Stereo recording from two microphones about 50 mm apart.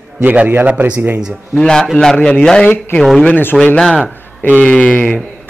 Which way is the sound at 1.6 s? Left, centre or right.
Centre.